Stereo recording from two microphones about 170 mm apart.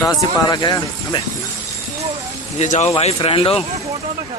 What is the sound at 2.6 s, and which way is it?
Speech, 45° left (ahead or behind).